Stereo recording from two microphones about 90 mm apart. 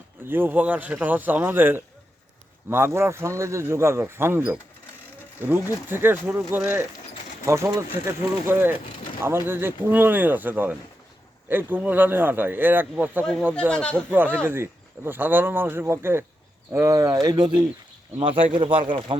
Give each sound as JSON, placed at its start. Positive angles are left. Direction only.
{"t": 0.3, "sound": "a man's voice", "side_deg": -25}
{"t": 7.4, "sound": "a man's voice", "side_deg": -35}
{"t": 13.5, "sound": "speech", "side_deg": 10}
{"t": 13.9, "sound": "a man's voice", "side_deg": -20}
{"t": 18.2, "sound": "speech", "side_deg": -65}